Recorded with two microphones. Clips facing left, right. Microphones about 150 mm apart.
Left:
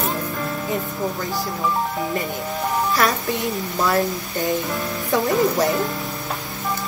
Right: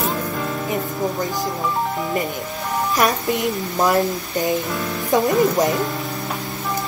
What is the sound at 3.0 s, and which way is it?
A woman's voice, 20° right (ahead or behind).